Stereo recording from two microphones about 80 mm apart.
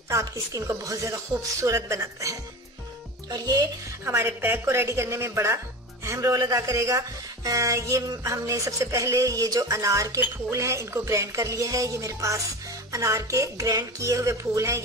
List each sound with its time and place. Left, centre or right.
0.1 s speech: right
3.3 s speech: right
4.0 s speech: right
6.0 s speech: right